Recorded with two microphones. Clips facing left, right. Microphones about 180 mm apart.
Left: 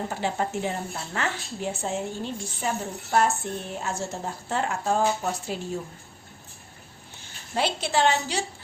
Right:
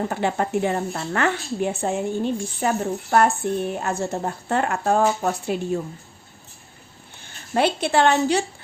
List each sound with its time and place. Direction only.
0.1 s a woman's voice: 60° right (ahead or behind)
7.2 s speech: 55° right (ahead or behind)